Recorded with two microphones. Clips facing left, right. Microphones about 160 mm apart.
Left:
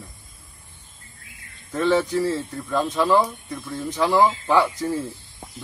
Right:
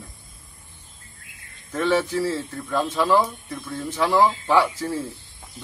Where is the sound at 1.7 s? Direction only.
Centre (ahead or behind).